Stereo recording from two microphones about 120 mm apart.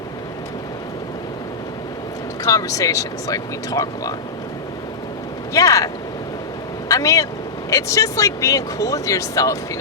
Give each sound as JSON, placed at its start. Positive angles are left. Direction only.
{"t": 2.4, "sound": "speech", "side_deg": 30}
{"t": 5.5, "sound": "speech", "side_deg": 30}